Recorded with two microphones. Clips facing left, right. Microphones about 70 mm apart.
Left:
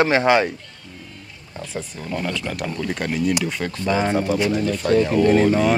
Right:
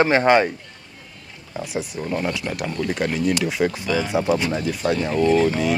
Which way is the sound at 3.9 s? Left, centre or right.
Left.